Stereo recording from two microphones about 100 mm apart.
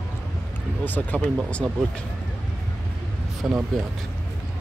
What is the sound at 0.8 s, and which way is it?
Speech, 15° left (ahead or behind).